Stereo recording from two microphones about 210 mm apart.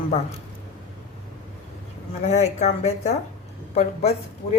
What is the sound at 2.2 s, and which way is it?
A woman's voice, 30° left (ahead or behind).